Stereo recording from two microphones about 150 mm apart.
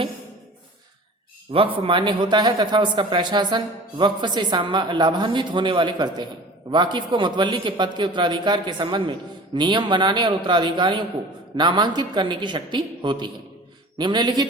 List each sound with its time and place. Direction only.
1.5 s a man's voice: 35° right (ahead or behind)